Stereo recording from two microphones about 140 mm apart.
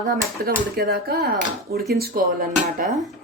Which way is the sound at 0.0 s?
70° right (ahead or behind).